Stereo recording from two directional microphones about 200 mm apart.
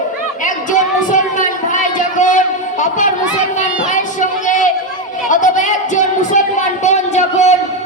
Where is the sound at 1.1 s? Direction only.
40° left (ahead or behind).